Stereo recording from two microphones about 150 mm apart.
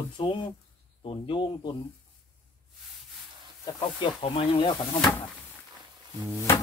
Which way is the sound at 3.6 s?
35° left (ahead or behind).